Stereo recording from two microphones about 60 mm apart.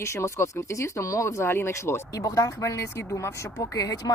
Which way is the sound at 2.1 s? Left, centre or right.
Left.